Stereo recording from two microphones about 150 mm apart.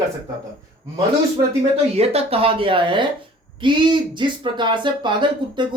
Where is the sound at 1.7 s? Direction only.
40° right (ahead or behind).